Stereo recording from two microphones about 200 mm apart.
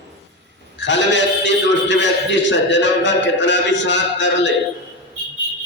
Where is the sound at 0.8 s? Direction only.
65° left (ahead or behind).